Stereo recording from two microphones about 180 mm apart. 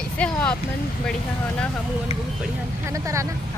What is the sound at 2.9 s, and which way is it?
Speech, 15° right (ahead or behind).